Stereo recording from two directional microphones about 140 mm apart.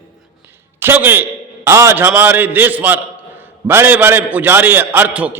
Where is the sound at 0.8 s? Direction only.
15° right (ahead or behind).